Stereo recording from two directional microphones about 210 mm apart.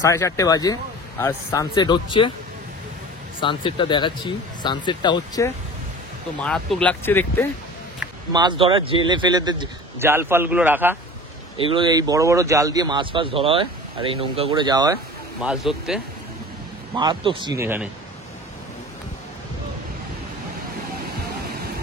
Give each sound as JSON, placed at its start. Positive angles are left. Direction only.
{"t": 0.0, "sound": "speech", "side_deg": 15}
{"t": 3.3, "sound": "speech", "side_deg": 25}
{"t": 6.4, "sound": "speech", "side_deg": 5}
{"t": 8.3, "sound": "speech", "side_deg": -20}
{"t": 11.7, "sound": "speech", "side_deg": -20}
{"t": 15.4, "sound": "speech", "side_deg": 0}
{"t": 16.9, "sound": "speech", "side_deg": -20}